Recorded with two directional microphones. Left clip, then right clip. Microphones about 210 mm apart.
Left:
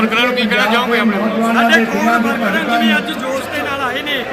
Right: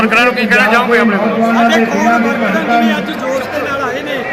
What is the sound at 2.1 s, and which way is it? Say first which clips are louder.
Speech: right 2 dB; 5° left (ahead or behind).